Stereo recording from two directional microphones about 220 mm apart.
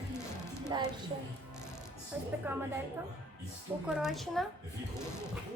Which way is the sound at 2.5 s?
10° right (ahead or behind).